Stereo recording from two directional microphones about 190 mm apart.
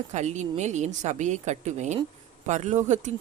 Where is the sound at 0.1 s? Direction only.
35° right (ahead or behind).